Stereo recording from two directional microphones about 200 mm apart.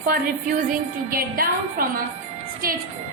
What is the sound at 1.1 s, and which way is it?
Speech, 45° right (ahead or behind).